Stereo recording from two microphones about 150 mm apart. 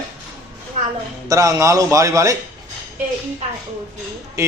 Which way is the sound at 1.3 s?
20° right (ahead or behind).